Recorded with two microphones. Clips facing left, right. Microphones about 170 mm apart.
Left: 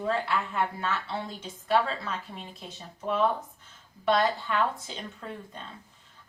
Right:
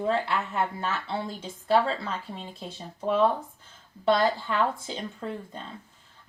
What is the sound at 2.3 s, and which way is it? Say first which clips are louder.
Speech: right 4 dB; 30° right (ahead or behind).